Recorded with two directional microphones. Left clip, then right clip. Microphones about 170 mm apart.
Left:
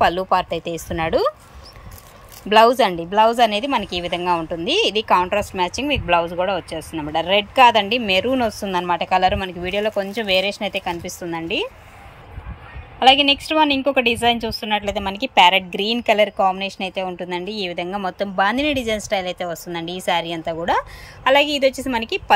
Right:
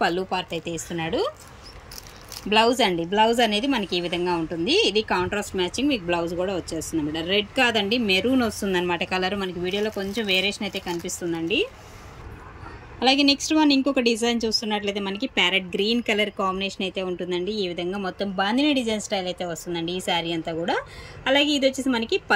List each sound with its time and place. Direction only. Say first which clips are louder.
0.3 s a woman's voice: left 8 dB; 15° left (ahead or behind)
2.9 s a woman's voice: left 4 dB; 10° left (ahead or behind)
13.0 s a woman's voice: left 6 dB; centre (ahead or behind)